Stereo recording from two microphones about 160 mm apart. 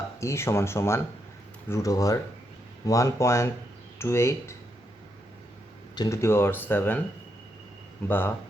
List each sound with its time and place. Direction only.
0.2 s speech: 15° left (ahead or behind)
6.0 s speech: 20° left (ahead or behind)
8.0 s speech: 15° left (ahead or behind)